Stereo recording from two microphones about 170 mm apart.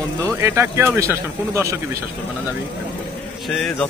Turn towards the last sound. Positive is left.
turn(degrees=5)  # may be behind; listen again after turning